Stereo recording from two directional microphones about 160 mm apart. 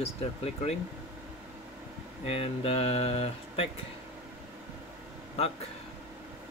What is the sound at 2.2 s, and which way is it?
Speech, 35° left (ahead or behind).